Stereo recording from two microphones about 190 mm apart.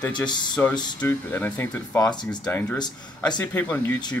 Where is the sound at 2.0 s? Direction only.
20° left (ahead or behind).